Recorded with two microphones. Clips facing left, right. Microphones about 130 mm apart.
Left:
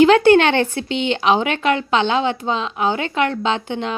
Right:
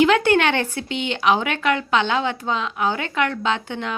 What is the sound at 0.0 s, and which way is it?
Speech, 30° left (ahead or behind).